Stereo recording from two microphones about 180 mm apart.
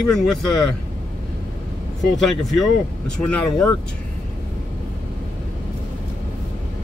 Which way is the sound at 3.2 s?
5° left (ahead or behind).